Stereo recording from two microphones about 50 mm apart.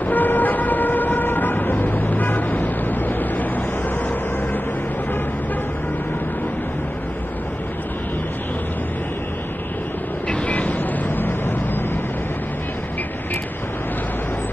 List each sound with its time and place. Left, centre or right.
0.1 s vehicle: left
10.2 s vehicle: left
11.1 s vehicle: left